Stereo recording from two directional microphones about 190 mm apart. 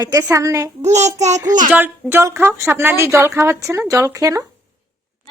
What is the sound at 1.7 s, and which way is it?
Speech, 10° right (ahead or behind).